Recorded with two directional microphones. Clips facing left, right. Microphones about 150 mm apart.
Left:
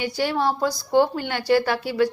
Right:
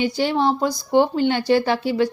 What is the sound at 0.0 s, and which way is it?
A woman's voice, 20° right (ahead or behind).